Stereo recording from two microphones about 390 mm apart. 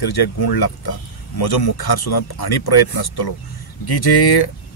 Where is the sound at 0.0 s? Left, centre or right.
Left.